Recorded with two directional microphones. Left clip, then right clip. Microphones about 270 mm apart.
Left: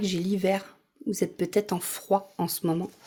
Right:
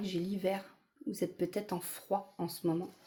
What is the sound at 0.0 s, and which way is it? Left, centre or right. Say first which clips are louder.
Speech: left 8 dB; left.